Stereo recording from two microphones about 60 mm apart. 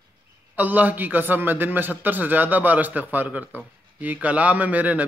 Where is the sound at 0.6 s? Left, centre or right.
Right.